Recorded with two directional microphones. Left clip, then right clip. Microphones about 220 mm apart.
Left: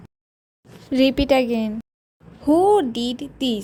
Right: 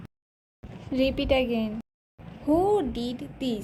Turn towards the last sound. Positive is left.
turn(degrees=30)  # may be behind; listen again after turning